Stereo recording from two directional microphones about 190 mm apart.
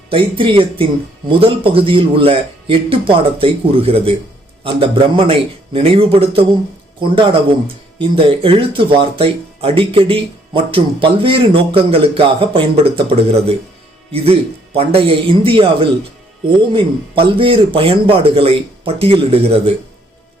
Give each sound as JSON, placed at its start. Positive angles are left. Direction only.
{"t": 0.1, "sound": "speech", "side_deg": -30}
{"t": 7.9, "sound": "speech", "side_deg": -30}